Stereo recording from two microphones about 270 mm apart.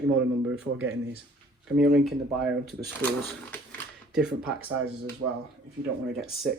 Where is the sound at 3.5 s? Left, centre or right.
Centre.